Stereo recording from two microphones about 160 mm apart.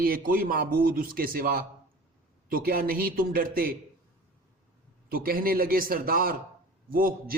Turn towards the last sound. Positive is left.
turn(degrees=-60)  # may be behind; listen again after turning